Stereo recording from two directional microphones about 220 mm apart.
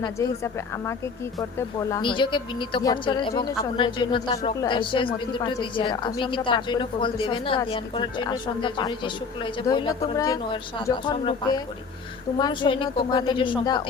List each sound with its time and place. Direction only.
0.0 s a woman's voice: 15° left (ahead or behind)